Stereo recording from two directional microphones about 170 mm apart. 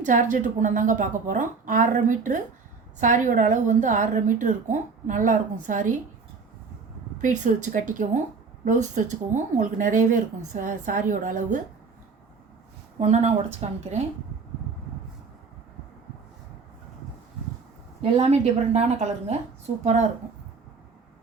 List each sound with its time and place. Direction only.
0.0 s a woman's voice: 50° right (ahead or behind)
7.2 s a woman's voice: 50° right (ahead or behind)
13.0 s a woman's voice: 40° right (ahead or behind)
18.0 s a woman's voice: 40° right (ahead or behind)